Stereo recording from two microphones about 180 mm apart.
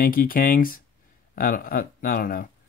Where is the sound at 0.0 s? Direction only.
50° left (ahead or behind).